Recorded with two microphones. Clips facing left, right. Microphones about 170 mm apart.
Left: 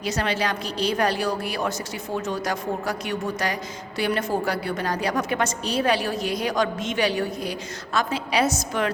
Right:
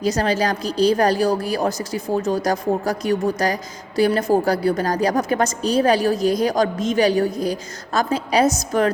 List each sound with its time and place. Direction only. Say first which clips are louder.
0.0 s a woman's voice: right 6 dB; 40° right (ahead or behind)